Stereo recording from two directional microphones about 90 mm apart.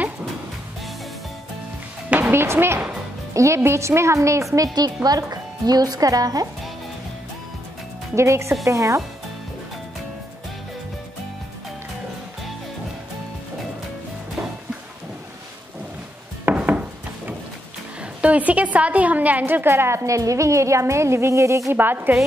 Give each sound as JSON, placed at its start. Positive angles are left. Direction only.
{"t": 2.0, "sound": "music", "side_deg": -15}
{"t": 2.3, "sound": "a woman's voice", "side_deg": -25}
{"t": 4.7, "sound": "speech", "side_deg": -45}
{"t": 8.2, "sound": "a woman's voice", "side_deg": -30}
{"t": 16.4, "sound": "wood", "side_deg": -15}
{"t": 18.2, "sound": "a woman's voice", "side_deg": -15}
{"t": 21.7, "sound": "a woman's voice", "side_deg": -20}